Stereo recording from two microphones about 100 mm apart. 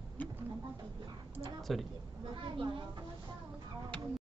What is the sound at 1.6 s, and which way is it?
Speech, centre (ahead or behind).